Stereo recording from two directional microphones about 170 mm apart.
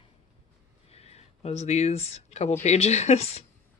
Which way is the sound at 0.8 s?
40° left (ahead or behind).